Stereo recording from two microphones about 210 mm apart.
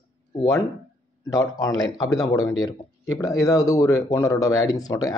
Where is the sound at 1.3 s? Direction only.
15° left (ahead or behind).